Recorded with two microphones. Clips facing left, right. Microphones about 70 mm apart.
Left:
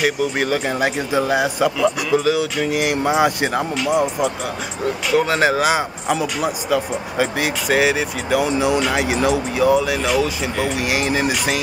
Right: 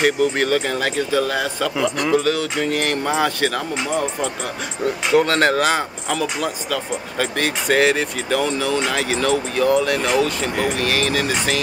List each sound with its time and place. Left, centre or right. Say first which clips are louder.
0.0 s speech: right 2 dB; centre
10.8 s speech: left 1 dB; centre